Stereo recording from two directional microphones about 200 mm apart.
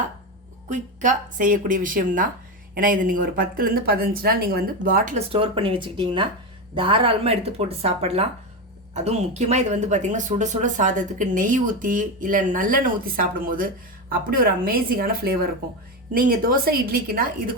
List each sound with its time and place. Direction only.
0.7 s speech: 40° right (ahead or behind)
5.3 s speech: 25° right (ahead or behind); by 17.5 s 45° right (ahead or behind)